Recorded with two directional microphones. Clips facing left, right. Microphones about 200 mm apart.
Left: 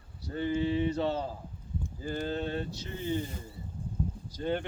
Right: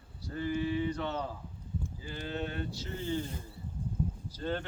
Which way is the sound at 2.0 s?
45° left (ahead or behind).